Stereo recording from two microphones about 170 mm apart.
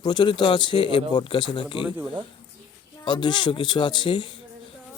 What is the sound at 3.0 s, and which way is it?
Speech, 25° left (ahead or behind).